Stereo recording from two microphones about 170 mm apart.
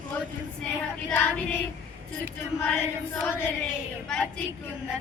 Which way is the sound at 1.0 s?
10° left (ahead or behind).